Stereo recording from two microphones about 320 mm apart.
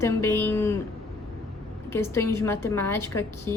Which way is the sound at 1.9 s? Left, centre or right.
Centre.